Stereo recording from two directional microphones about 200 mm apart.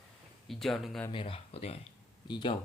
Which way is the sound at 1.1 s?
25° left (ahead or behind).